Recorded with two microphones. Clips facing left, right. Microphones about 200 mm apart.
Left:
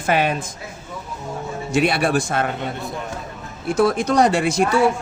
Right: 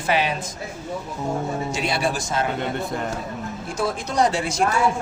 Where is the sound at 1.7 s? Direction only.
60° left (ahead or behind).